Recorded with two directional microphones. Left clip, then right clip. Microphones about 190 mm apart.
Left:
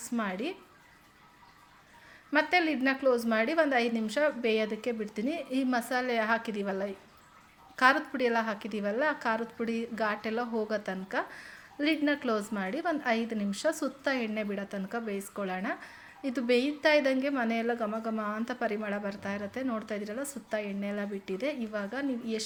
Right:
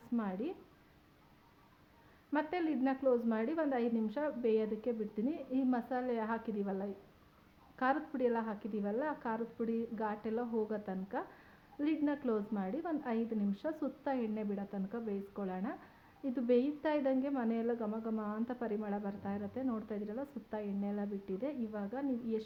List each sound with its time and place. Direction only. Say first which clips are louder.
0.2 s a woman's voice: left 8 dB; 15° left (ahead or behind)
2.3 s a woman's voice: left 9 dB; 15° left (ahead or behind)